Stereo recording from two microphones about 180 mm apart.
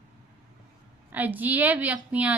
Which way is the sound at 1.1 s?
10° right (ahead or behind).